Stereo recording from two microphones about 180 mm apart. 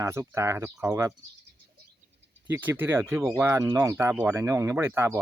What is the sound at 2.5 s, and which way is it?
Speech, 10° right (ahead or behind).